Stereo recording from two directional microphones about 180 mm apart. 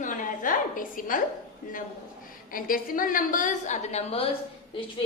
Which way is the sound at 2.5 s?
50° left (ahead or behind).